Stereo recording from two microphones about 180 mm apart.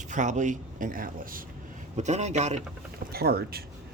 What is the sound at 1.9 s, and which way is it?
Speech, 40° right (ahead or behind).